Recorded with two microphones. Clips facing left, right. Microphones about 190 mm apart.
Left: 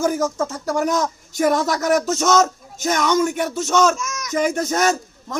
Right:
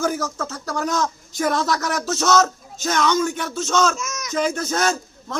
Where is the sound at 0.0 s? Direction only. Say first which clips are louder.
Left 4 dB; 15° left (ahead or behind).